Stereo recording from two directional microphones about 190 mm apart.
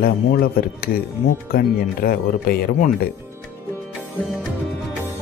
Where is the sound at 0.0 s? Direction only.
50° left (ahead or behind).